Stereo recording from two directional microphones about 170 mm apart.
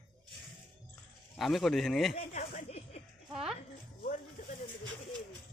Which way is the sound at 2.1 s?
40° left (ahead or behind).